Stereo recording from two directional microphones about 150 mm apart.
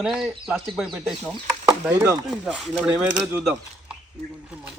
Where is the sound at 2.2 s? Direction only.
5° right (ahead or behind).